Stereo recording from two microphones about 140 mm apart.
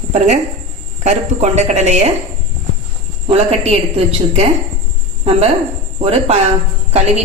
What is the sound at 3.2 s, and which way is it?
A woman's voice, 50° right (ahead or behind).